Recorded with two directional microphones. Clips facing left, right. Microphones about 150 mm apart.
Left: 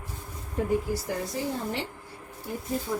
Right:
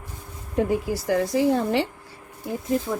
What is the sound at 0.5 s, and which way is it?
A woman's voice, 90° right.